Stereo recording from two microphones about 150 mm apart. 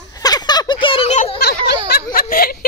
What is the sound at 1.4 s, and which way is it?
Speech, 90° left.